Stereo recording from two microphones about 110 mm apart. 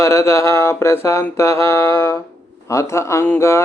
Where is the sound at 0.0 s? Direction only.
25° left (ahead or behind).